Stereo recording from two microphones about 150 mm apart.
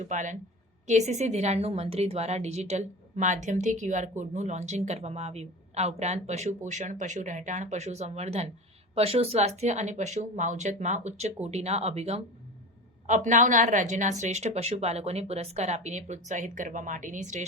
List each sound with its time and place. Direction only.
0.0 s a woman's voice: 55° right (ahead or behind)